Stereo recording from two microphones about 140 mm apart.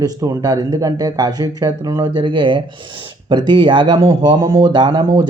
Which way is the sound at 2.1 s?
35° right (ahead or behind).